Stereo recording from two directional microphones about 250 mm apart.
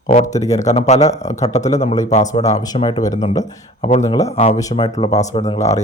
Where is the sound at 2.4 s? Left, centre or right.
Centre.